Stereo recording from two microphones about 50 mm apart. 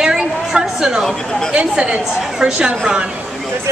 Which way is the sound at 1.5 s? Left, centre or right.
Centre.